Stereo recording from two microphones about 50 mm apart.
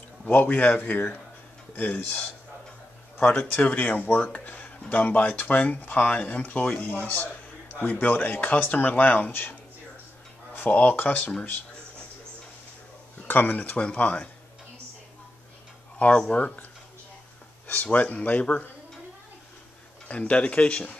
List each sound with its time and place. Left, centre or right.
0.3 s speech: left
3.6 s speech: left
13.3 s speech: left
16.0 s speech: left
17.9 s speech: left
20.1 s speech: left